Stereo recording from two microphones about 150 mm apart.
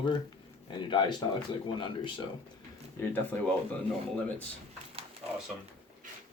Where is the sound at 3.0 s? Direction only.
15° left (ahead or behind).